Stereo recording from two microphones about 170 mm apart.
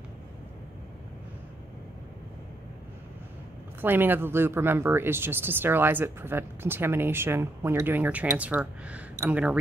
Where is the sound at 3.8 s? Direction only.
10° right (ahead or behind).